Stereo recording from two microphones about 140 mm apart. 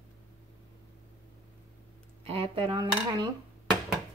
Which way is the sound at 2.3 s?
45° right (ahead or behind).